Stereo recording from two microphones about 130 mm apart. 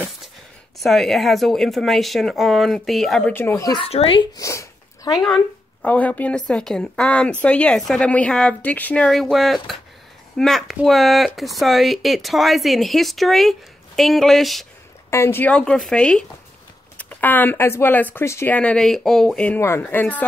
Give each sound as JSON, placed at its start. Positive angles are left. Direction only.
{"t": 0.7, "sound": "speech", "side_deg": 0}
{"t": 3.7, "sound": "speech", "side_deg": 45}
{"t": 4.4, "sound": "sneeze", "side_deg": 25}
{"t": 5.2, "sound": "speech", "side_deg": 5}
{"t": 15.0, "sound": "speech", "side_deg": 20}